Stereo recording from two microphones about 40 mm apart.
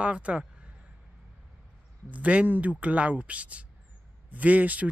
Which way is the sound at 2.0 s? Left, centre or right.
Right.